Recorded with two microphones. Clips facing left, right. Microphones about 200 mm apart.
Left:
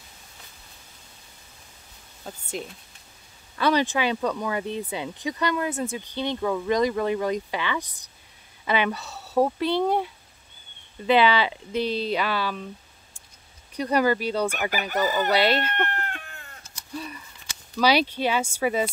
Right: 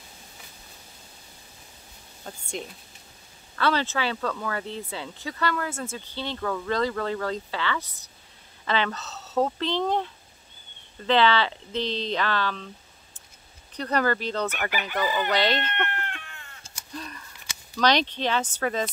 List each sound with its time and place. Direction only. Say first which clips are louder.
2.3 s speech: left 2 dB; 5° left (ahead or behind)
3.5 s speech: left 3 dB; 15° left (ahead or behind)
13.7 s speech: left 3 dB; 10° left (ahead or behind)
14.7 s speech: left 2 dB; 45° left (ahead or behind)
15.3 s speech: left 4 dB; 10° left (ahead or behind)
15.7 s a sound: left 2 dB; 40° left (ahead or behind)
16.9 s a sound: left 3 dB; 10° left (ahead or behind)
17.7 s speech: left 2 dB; 10° left (ahead or behind)